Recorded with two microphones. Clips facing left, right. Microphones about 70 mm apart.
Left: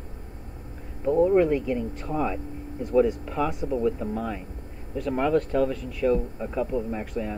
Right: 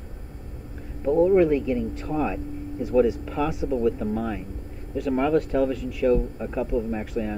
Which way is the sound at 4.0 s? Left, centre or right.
Left.